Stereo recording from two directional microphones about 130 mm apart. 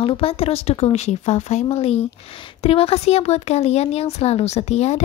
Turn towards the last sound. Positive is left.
turn(degrees=55)  # may be behind; listen again after turning